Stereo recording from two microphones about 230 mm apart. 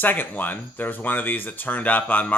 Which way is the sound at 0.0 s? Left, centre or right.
Centre.